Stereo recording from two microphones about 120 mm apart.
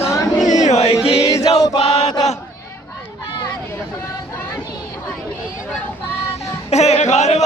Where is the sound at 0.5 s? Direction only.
75° left (ahead or behind).